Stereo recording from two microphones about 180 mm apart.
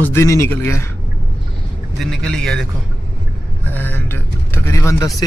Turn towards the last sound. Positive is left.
turn(degrees=15)  # may be behind; listen again after turning